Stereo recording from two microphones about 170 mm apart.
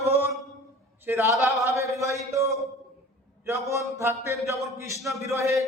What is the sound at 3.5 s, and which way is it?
A man's voice, 15° right (ahead or behind).